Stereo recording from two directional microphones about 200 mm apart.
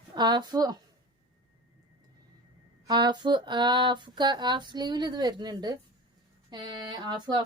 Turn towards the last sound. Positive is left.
turn(degrees=-20)  # may be behind; listen again after turning